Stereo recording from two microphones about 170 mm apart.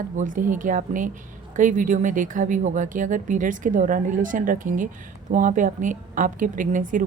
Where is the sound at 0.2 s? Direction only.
50° right (ahead or behind).